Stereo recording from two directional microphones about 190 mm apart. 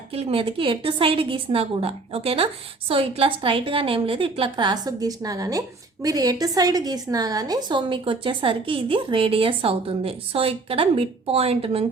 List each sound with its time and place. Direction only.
0.1 s a woman's voice: 30° right (ahead or behind)